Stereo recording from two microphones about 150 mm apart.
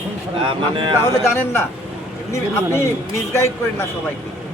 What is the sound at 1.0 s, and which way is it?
Speech, 15° left (ahead or behind).